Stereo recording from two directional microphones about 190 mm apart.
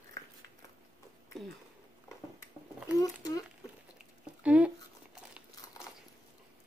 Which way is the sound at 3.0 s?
20° left (ahead or behind).